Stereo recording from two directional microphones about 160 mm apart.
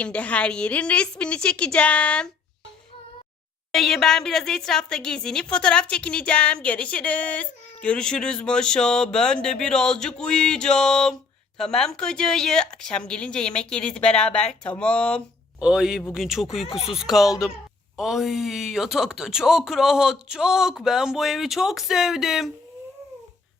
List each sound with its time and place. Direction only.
0.0 s a woman's voice: 10° left (ahead or behind)
3.7 s speech: centre (ahead or behind)
15.6 s speech: 5° right (ahead or behind)
16.6 s speech: 35° left (ahead or behind)
16.9 s speech: centre (ahead or behind)